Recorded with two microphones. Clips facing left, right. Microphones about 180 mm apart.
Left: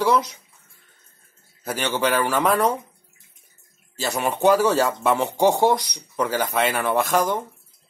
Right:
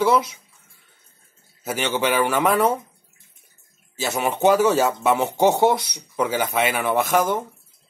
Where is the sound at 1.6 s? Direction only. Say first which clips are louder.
Even; 10° right (ahead or behind).